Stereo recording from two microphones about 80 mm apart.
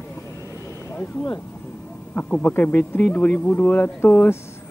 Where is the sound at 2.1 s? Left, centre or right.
Left.